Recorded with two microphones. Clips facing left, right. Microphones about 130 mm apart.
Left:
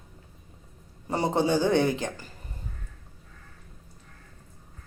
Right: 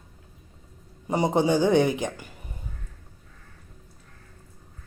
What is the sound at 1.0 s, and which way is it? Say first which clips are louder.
Speech: right 3 dB; 15° right (ahead or behind).